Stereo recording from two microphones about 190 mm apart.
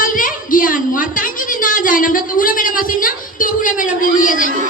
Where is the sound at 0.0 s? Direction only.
45° left (ahead or behind).